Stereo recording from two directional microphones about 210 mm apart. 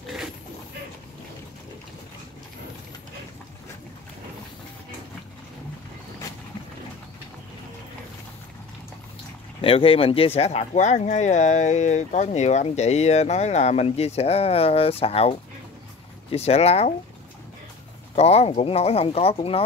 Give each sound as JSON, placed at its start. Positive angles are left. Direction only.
{"t": 0.0, "sound": "a sound", "side_deg": 0}
{"t": 9.6, "sound": "speech", "side_deg": 25}
{"t": 18.1, "sound": "speech", "side_deg": 30}